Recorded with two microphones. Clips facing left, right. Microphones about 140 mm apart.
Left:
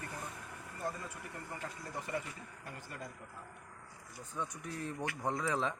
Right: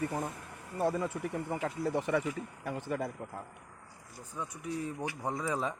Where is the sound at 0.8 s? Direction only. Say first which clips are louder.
Right 11 dB; 85° right.